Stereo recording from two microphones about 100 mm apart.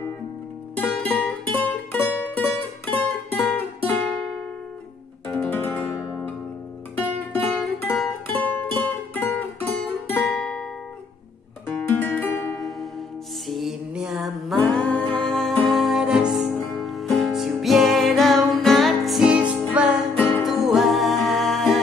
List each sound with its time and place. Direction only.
0.7 s music: 15° left (ahead or behind)
5.4 s music: 20° left (ahead or behind)
7.0 s music: 15° left (ahead or behind)
11.7 s music: 20° left (ahead or behind)
13.5 s mantra: centre (ahead or behind)
14.6 s music: 10° left (ahead or behind)
15.2 s music: 5° left (ahead or behind)
20.2 s music: 15° left (ahead or behind)
20.4 s music: centre (ahead or behind)